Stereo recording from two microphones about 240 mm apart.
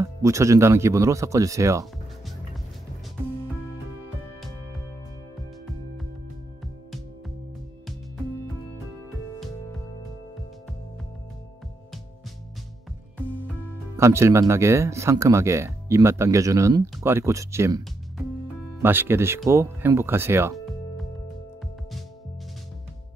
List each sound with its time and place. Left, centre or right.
0.0 s speech: centre
13.9 s speech: centre